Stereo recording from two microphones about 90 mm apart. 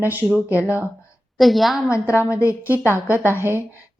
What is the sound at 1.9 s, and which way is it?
Speech, 30° left (ahead or behind).